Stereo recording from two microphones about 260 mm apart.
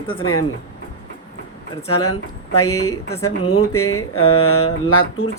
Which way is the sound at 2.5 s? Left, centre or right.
Left.